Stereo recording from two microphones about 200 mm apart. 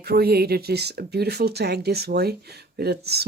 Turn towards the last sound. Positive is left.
turn(degrees=-55)  # may be behind; listen again after turning